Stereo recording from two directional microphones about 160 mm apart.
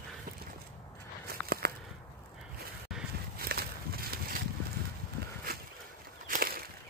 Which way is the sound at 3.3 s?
70° right (ahead or behind).